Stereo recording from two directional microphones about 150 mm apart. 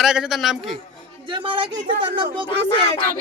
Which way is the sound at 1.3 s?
35° right (ahead or behind).